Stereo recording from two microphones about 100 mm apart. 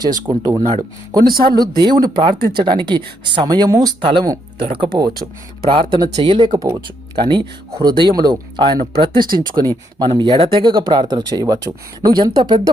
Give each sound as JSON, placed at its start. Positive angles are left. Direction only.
{"t": 0.1, "sound": "speech", "side_deg": -40}
{"t": 3.4, "sound": "speech", "side_deg": -40}
{"t": 4.0, "sound": "speech", "side_deg": -55}
{"t": 4.9, "sound": "speech", "side_deg": -45}
{"t": 5.6, "sound": "speech", "side_deg": -60}
{"t": 10.3, "sound": "speech", "side_deg": -60}